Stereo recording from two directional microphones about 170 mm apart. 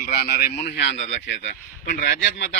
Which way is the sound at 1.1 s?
90° left.